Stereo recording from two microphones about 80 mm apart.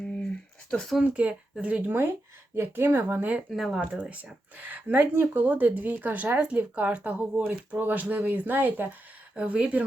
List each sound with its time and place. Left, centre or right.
0.7 s speech: centre
0.9 s speech: centre
2.6 s a woman's voice: right
3.5 s speech: centre
3.8 s a woman's voice: centre